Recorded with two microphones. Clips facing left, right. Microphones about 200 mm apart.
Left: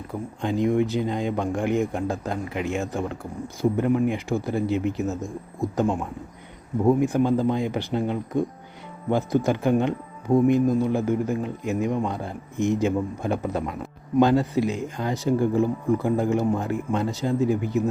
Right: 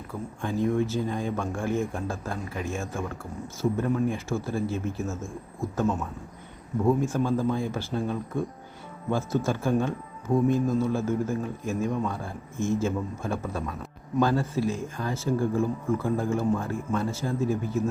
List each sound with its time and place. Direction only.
0.1 s speech: 20° left (ahead or behind)
6.8 s speech: 15° left (ahead or behind)